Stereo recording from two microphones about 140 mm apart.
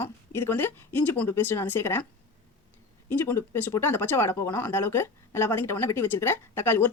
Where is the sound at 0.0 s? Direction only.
15° left (ahead or behind).